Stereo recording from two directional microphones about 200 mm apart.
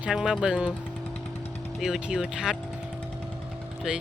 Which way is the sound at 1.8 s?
5° right (ahead or behind).